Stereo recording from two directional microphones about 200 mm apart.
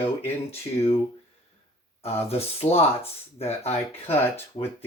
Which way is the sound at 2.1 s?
30° left (ahead or behind).